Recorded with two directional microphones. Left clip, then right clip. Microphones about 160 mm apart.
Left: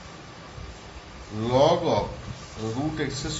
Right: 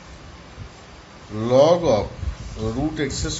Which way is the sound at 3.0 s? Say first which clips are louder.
Right 5 dB; 60° right (ahead or behind).